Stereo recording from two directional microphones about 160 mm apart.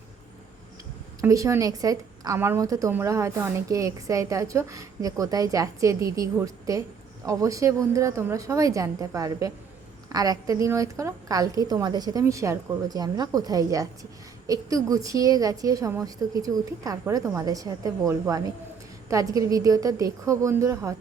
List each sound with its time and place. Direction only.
1.2 s a woman's voice: 20° right (ahead or behind)